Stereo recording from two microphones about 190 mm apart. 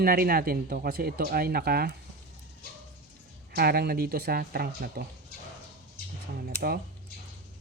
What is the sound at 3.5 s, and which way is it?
Speech, 55° right (ahead or behind).